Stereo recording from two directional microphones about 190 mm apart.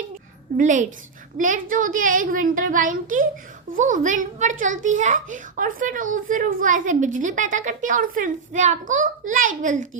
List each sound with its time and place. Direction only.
0.5 s a child's voice: 40° right (ahead or behind)